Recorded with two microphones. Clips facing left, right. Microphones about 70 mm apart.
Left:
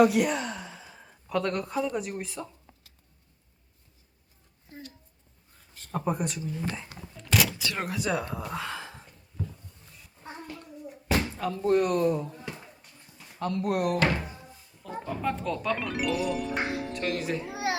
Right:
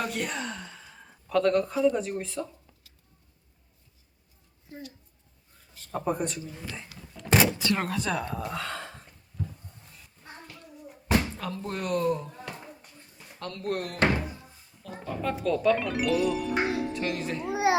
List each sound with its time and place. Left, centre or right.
0.0 s speech: centre
4.7 s a woman's voice: left
5.9 s speech: centre
7.3 s a sound: right
7.8 s speech: centre
8.3 s a sound: centre
11.3 s speech: centre
17.5 s children playing: right